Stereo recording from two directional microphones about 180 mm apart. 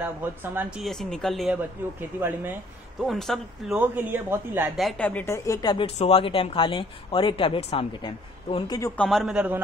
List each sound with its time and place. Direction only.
0.0 s speech: 10° right (ahead or behind)
3.0 s speech: centre (ahead or behind)
4.7 s speech: 5° left (ahead or behind); by 5.9 s 20° left (ahead or behind)
5.9 s speech: 35° left (ahead or behind)
8.9 s a man's voice: 5° left (ahead or behind)